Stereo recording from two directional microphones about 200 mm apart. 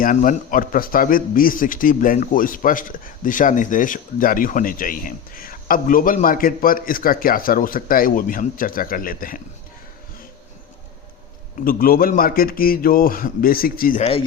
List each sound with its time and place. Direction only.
0.0 s speech: 40° left (ahead or behind)
11.6 s speech: 45° left (ahead or behind)